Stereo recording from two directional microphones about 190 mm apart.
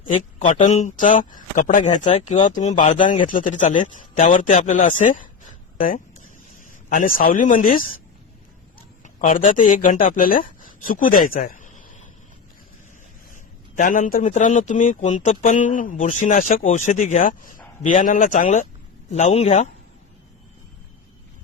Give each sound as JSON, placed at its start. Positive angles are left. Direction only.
{"t": 0.1, "sound": "a man's voice", "side_deg": 40}
{"t": 5.4, "sound": "a sound", "side_deg": 45}
{"t": 6.9, "sound": "speech", "side_deg": 45}
{"t": 9.1, "sound": "speech", "side_deg": 40}
{"t": 11.3, "sound": "a sound", "side_deg": 45}
{"t": 13.3, "sound": "a man's voice", "side_deg": 45}